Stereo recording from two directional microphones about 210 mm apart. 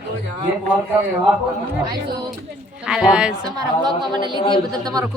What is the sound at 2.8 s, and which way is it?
Speech, 5° right (ahead or behind).